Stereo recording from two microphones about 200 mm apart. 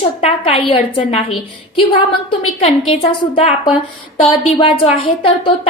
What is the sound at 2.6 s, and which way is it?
A woman's voice, 30° left (ahead or behind).